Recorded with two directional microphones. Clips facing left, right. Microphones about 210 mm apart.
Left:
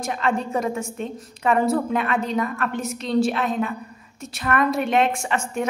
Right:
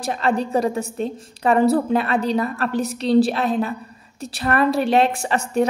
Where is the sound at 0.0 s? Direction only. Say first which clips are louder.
Right 3 dB; 35° right (ahead or behind).